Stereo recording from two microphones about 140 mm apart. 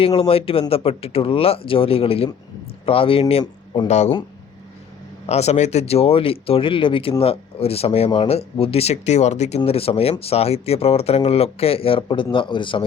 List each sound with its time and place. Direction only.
0.2 s a man's voice: 40° left (ahead or behind)
3.8 s speech: 55° left (ahead or behind)
5.2 s speech: 50° left (ahead or behind)
9.6 s a man's voice: 45° left (ahead or behind)